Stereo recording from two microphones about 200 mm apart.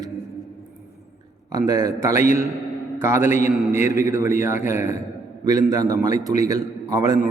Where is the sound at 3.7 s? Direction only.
15° right (ahead or behind).